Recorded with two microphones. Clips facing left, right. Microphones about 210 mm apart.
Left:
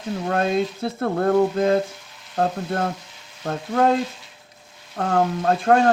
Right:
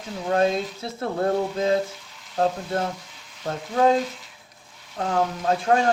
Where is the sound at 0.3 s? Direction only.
55° left (ahead or behind).